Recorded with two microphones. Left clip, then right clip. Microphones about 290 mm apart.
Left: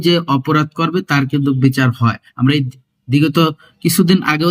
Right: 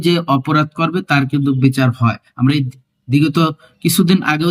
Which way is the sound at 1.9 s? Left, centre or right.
Right.